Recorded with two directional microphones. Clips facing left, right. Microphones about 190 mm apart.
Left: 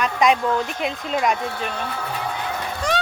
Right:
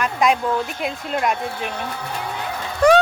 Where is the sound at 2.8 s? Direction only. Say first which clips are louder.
Right 11 dB; 60° right (ahead or behind).